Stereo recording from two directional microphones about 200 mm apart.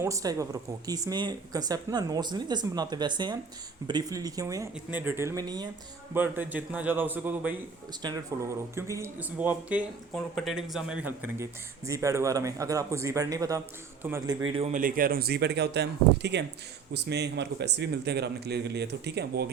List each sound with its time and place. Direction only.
0.0 s speech: 15° right (ahead or behind)
6.1 s speech: 10° right (ahead or behind)
8.0 s speech: 20° right (ahead or behind)
14.4 s speech: 25° right (ahead or behind)
14.7 s a man's voice: 45° right (ahead or behind)